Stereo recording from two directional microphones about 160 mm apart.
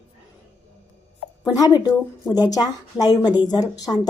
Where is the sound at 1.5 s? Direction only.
20° left (ahead or behind).